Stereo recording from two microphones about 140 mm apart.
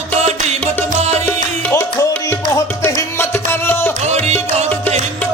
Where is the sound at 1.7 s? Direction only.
15° left (ahead or behind).